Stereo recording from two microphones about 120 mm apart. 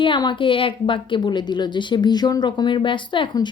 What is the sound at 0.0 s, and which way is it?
A woman's voice, 40° left (ahead or behind).